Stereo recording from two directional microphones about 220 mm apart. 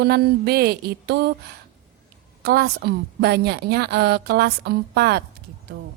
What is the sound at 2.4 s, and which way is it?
Speech, 45° right (ahead or behind).